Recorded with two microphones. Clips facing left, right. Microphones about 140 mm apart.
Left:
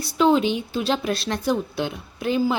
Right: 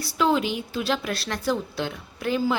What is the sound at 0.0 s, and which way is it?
A woman's voice, 20° left (ahead or behind).